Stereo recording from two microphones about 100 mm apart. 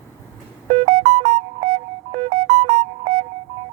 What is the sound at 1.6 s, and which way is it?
Music, 90° right.